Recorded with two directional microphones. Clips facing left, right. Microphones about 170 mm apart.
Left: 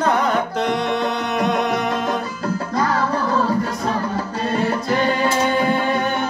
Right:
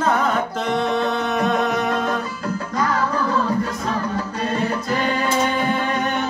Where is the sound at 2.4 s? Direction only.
35° left (ahead or behind).